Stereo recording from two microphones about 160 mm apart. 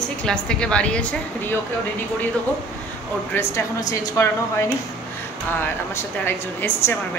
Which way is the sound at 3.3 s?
15° left (ahead or behind).